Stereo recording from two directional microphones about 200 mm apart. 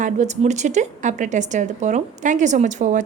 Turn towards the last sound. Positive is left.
turn(degrees=-40)  # may be behind; listen again after turning